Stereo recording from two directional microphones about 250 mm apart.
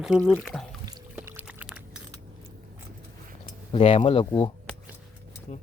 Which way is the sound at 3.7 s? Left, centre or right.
Left.